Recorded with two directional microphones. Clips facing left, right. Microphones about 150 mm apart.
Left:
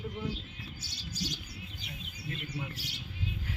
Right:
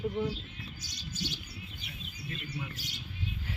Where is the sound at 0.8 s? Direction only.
35° left (ahead or behind).